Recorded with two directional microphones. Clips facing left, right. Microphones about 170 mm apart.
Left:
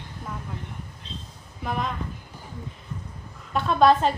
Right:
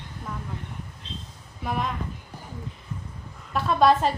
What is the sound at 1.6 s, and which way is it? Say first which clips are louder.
Speech: even; centre (ahead or behind).